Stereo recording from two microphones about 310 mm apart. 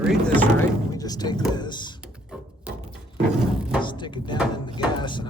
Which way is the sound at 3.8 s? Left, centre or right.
Centre.